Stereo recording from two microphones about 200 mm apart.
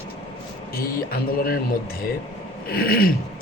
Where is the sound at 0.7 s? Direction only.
45° left (ahead or behind).